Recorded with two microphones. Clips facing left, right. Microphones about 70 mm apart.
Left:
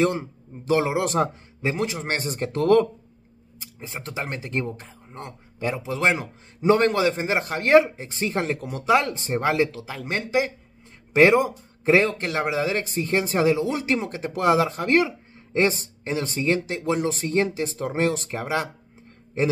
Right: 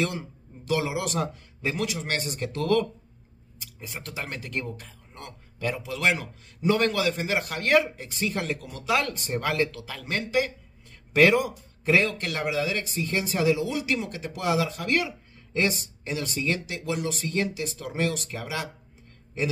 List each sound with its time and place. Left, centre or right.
0.0 s speech: left
1.6 s a man's voice: left
3.8 s a man's voice: left